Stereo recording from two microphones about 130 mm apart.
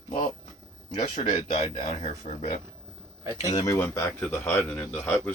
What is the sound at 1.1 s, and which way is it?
Speech, 50° left (ahead or behind).